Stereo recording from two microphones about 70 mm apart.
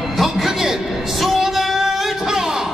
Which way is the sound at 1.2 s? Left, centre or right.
Centre.